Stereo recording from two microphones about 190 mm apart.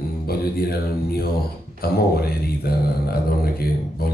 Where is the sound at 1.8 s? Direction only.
55° left (ahead or behind).